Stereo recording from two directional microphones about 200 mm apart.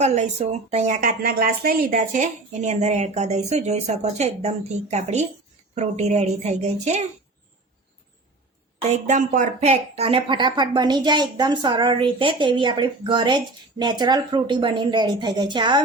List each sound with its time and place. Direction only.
0.0 s speech: 35° right (ahead or behind)
8.8 s speech: 35° right (ahead or behind)